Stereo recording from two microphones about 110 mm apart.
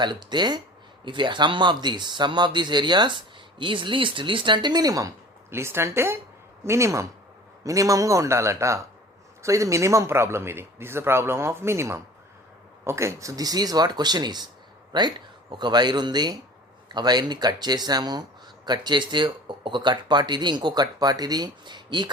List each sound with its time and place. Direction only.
0.0 s a man's voice: 40° right (ahead or behind)